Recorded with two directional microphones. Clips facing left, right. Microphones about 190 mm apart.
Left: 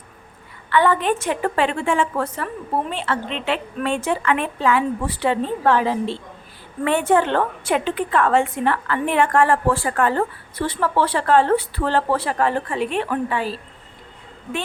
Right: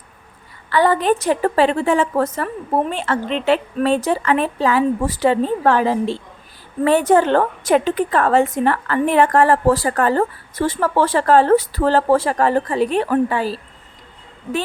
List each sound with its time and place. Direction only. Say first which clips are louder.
0.7 s a woman's voice: right 2 dB; 35° right (ahead or behind)